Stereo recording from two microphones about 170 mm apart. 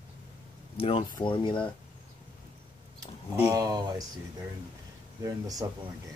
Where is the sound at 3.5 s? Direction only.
20° right (ahead or behind).